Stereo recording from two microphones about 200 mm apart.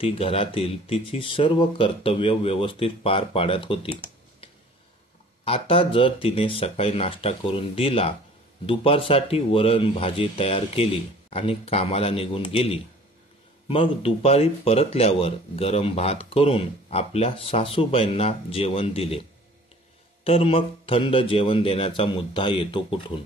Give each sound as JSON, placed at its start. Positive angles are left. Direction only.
{"t": 0.0, "sound": "speech", "side_deg": 30}
{"t": 5.4, "sound": "speech", "side_deg": 30}
{"t": 20.2, "sound": "speech", "side_deg": 30}